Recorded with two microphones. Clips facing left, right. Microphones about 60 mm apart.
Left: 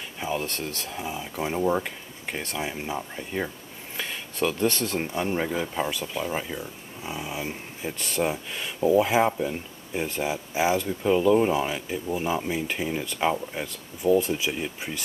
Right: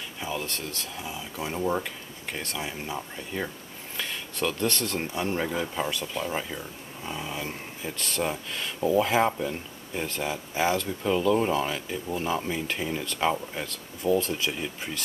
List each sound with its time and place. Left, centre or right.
0.2 s speech: centre
0.9 s speech: centre